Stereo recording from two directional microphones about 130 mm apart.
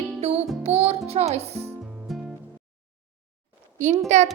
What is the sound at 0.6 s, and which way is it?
A child's voice, 55° right (ahead or behind).